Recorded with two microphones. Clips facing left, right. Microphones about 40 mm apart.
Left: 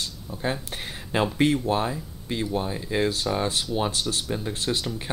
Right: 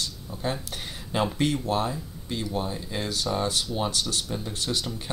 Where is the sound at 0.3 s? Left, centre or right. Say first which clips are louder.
Left 2 dB; centre.